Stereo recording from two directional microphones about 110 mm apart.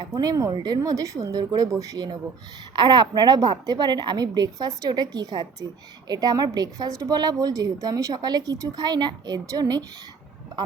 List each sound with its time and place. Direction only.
0.1 s a woman's voice: 35° right (ahead or behind)